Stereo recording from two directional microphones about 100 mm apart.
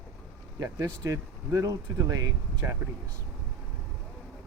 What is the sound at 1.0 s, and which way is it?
Speech, 35° right (ahead or behind).